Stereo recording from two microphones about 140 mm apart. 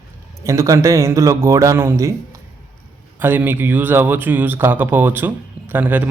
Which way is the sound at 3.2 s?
15° right (ahead or behind).